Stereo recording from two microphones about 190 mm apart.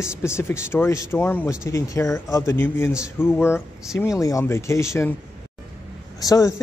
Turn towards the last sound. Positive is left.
turn(degrees=15)  # may be behind; listen again after turning